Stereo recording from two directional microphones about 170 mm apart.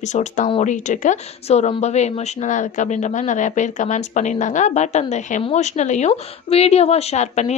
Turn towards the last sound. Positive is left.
turn(degrees=40)  # may be behind; listen again after turning